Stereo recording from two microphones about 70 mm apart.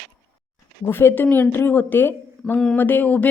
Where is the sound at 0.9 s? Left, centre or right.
Left.